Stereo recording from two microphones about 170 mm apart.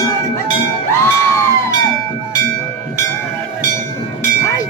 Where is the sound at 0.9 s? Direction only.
15° left (ahead or behind).